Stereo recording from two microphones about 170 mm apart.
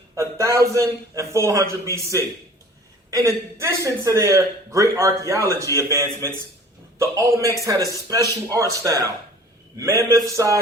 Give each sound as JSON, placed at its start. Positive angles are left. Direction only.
{"t": 0.2, "sound": "speech", "side_deg": -20}
{"t": 3.1, "sound": "speech", "side_deg": -20}